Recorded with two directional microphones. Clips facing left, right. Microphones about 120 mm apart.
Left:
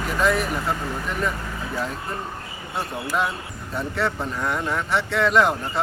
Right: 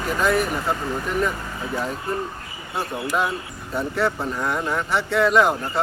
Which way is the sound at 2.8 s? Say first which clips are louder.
Right 1 dB; centre (ahead or behind).